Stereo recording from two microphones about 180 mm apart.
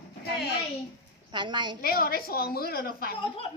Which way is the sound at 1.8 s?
55° left (ahead or behind).